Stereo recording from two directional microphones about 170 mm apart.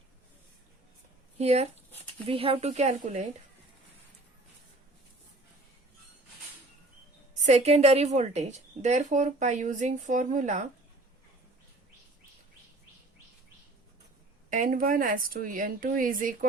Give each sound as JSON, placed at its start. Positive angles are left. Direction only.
{"t": 1.4, "sound": "speech", "side_deg": -40}
{"t": 7.4, "sound": "a woman's voice", "side_deg": -40}
{"t": 14.5, "sound": "a woman's voice", "side_deg": -50}